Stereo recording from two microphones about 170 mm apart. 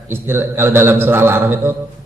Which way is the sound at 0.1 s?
15° right (ahead or behind).